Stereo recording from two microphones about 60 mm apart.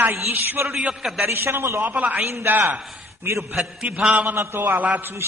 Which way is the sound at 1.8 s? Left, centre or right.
Right.